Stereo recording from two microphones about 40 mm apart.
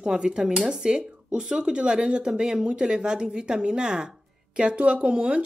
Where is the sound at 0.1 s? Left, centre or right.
Centre.